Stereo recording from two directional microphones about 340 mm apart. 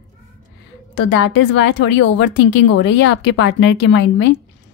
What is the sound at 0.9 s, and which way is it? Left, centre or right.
A woman's voice, left.